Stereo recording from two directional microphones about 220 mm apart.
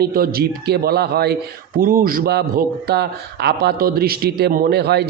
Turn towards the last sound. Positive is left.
turn(degrees=-45)  # may be behind; listen again after turning